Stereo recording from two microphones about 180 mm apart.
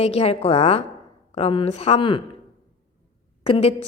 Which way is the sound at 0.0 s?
35° left (ahead or behind).